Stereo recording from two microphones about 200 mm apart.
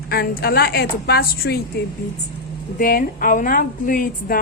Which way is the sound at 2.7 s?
45° left (ahead or behind).